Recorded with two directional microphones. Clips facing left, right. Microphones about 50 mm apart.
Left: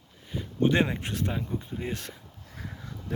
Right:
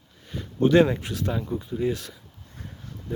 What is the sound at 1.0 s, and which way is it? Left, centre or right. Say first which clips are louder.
Speech: right 2 dB; left.